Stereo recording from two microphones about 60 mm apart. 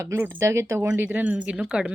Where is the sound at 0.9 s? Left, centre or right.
Right.